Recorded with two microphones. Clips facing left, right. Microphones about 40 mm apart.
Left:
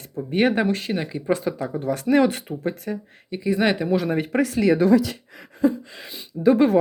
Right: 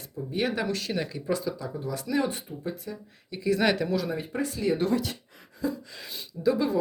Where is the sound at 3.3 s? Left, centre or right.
Left.